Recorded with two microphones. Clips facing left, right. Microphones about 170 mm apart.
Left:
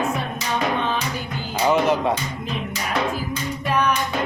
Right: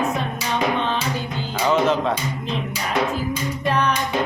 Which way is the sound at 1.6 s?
10° left (ahead or behind).